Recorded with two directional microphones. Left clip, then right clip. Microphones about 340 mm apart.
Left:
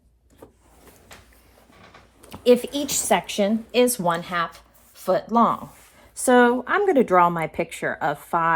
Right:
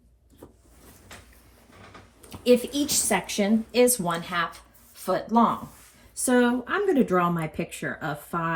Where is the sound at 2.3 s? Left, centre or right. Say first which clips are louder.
Left 3 dB; left.